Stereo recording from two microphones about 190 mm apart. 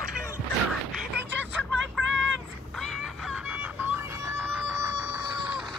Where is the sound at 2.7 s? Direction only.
Centre (ahead or behind); by 5.1 s 15° right (ahead or behind).